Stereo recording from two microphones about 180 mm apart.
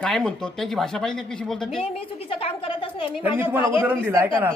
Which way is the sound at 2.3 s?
30° left (ahead or behind).